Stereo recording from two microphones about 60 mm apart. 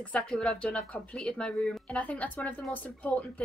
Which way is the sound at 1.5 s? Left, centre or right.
Centre.